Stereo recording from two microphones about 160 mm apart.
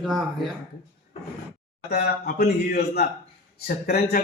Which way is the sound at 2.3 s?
75° left (ahead or behind).